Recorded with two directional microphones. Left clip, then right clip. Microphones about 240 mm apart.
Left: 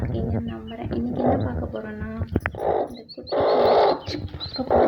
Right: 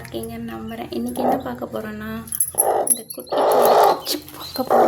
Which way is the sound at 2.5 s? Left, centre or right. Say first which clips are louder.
Right 5 dB; centre.